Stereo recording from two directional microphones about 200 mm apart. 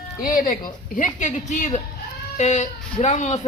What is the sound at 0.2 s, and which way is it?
Speech, 45° left (ahead or behind).